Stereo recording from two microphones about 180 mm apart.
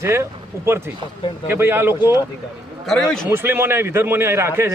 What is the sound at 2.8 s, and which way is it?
Speech, centre (ahead or behind).